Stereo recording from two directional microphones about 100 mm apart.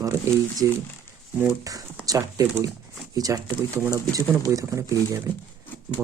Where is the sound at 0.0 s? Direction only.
35° right (ahead or behind).